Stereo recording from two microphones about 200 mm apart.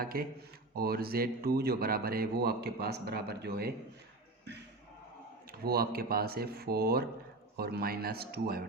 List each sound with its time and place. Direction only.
0.0 s a man's voice: 50° right (ahead or behind)
5.5 s a man's voice: 50° right (ahead or behind)